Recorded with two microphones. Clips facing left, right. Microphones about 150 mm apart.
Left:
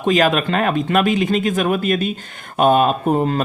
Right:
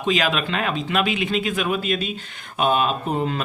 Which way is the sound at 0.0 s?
45° left (ahead or behind).